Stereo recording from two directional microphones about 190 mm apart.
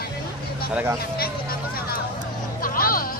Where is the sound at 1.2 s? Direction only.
50° left (ahead or behind).